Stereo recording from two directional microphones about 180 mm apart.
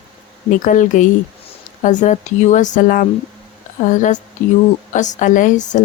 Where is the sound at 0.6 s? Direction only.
45° left (ahead or behind).